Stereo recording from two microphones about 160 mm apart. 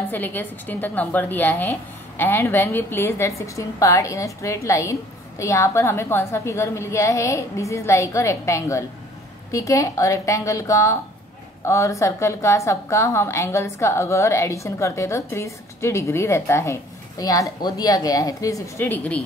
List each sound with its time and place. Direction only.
0.1 s a woman's voice: 10° left (ahead or behind)